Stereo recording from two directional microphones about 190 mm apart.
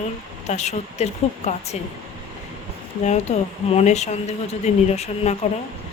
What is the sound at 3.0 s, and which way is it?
Speech, 35° left (ahead or behind).